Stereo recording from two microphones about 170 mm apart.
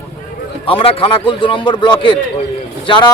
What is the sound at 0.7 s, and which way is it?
A man's voice, 30° left (ahead or behind).